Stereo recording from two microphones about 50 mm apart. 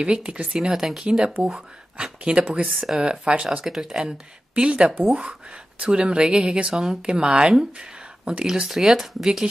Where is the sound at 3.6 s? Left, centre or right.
Centre.